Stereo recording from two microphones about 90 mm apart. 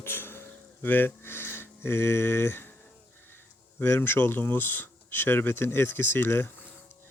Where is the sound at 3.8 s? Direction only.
25° left (ahead or behind).